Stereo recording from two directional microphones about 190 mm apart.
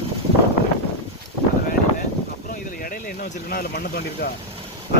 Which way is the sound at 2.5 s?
45° left (ahead or behind).